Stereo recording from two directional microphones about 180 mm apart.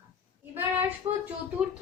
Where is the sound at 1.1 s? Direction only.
30° right (ahead or behind).